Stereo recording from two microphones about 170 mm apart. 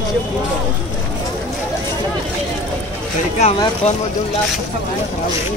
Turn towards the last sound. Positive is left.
turn(degrees=40)  # may be behind; listen again after turning